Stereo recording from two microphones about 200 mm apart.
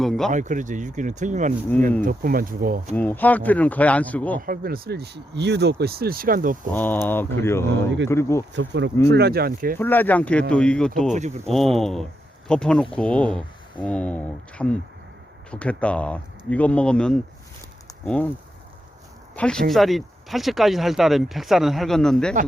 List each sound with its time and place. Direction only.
0.0 s speech: centre (ahead or behind)
0.3 s speech: 40° right (ahead or behind)
2.9 s speech: 10° left (ahead or behind)
4.4 s speech: 45° right (ahead or behind)
6.7 s speech: 10° left (ahead or behind)
8.5 s speech: 60° right (ahead or behind); by 9.7 s 45° right (ahead or behind)
9.7 s speech: 10° left (ahead or behind)
11.1 s speech: 35° right (ahead or behind)
11.4 s speech: centre (ahead or behind)
19.4 s speech: 5° left (ahead or behind)